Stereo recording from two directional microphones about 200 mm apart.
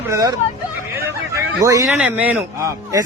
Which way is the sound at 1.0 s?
15° right (ahead or behind).